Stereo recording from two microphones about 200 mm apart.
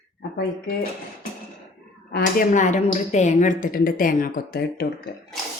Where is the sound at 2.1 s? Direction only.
40° left (ahead or behind).